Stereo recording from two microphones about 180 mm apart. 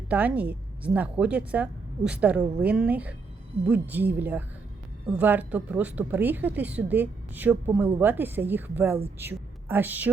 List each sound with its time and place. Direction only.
0.1 s a woman's voice: 10° right (ahead or behind)